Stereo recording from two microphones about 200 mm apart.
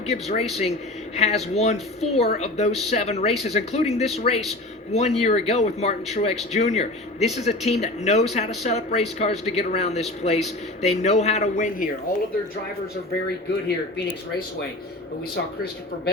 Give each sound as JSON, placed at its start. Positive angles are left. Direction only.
{"t": 0.1, "sound": "speech", "side_deg": 30}
{"t": 13.2, "sound": "speech", "side_deg": 55}